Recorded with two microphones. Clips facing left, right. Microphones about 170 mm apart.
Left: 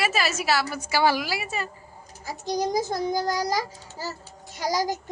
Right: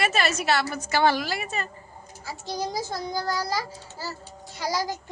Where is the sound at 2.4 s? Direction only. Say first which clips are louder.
Left 5 dB; 15° left (ahead or behind).